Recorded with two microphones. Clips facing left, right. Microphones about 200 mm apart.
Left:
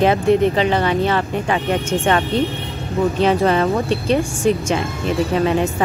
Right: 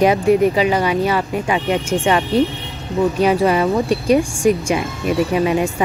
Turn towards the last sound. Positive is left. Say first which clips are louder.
# right 1 dB
turn(degrees=-10)  # may be behind; listen again after turning